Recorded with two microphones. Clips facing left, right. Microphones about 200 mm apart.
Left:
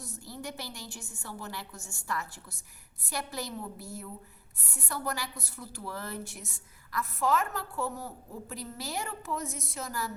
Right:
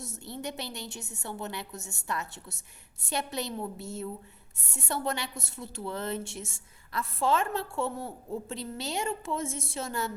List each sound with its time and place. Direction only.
0.3 s a woman's voice: 25° right (ahead or behind)